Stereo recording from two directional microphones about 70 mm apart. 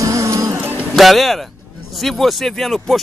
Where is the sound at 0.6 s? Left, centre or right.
Right.